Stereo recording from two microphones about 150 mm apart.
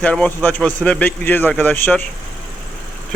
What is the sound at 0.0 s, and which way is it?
Speech, 10° left (ahead or behind).